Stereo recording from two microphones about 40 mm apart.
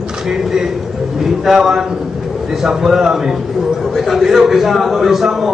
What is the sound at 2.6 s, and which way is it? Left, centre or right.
A man's voice, centre.